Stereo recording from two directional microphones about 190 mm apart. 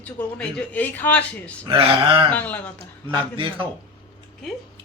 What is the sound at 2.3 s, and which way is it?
Speech, 10° left (ahead or behind).